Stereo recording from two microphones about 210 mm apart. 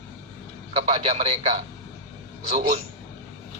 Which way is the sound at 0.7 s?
30° right (ahead or behind).